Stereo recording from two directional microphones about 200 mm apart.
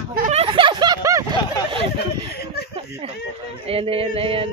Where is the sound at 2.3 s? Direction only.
50° left (ahead or behind).